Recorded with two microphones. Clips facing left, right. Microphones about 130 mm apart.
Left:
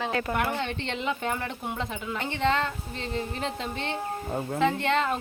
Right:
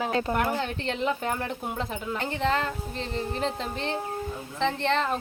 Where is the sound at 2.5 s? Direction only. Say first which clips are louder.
Even; 40° right (ahead or behind).